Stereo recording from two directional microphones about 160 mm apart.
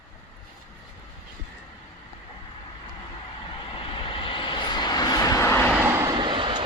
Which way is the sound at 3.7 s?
35° left (ahead or behind).